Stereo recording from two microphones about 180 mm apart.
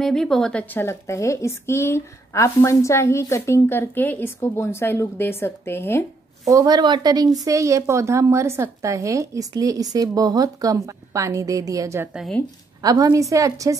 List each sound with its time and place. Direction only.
0.0 s a woman's voice: centre (ahead or behind)
6.5 s a woman's voice: 20° right (ahead or behind); by 12.4 s 5° right (ahead or behind)
12.8 s speech: 20° right (ahead or behind)